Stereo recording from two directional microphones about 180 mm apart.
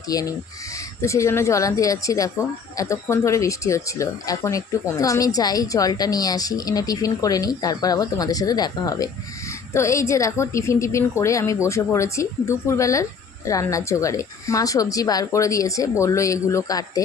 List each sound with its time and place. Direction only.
0.1 s a woman's voice: 20° left (ahead or behind)